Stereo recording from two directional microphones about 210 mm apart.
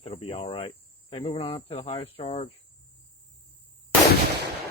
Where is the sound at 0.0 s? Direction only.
25° left (ahead or behind).